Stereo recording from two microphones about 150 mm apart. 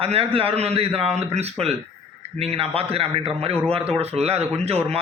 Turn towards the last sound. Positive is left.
turn(degrees=-45)  # may be behind; listen again after turning